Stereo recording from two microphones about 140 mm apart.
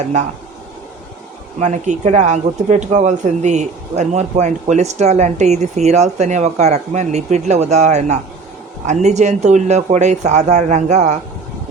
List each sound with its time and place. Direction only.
0.0 s speech: 55° right (ahead or behind)
1.5 s speech: 55° right (ahead or behind)